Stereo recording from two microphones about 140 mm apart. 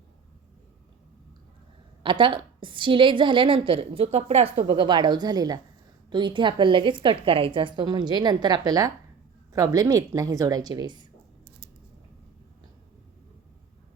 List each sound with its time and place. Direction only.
2.0 s a woman's voice: 35° right (ahead or behind)
4.5 s a woman's voice: 35° right (ahead or behind)